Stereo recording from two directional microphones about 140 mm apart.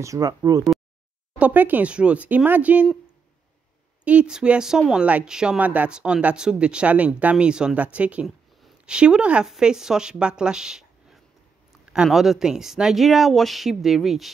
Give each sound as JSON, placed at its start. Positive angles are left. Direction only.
{"t": 0.0, "sound": "speech", "side_deg": -25}
{"t": 1.4, "sound": "speech", "side_deg": -10}
{"t": 4.0, "sound": "speech", "side_deg": -10}